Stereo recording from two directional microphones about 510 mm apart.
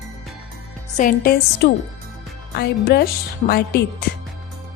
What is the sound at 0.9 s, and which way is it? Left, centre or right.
Speech, centre.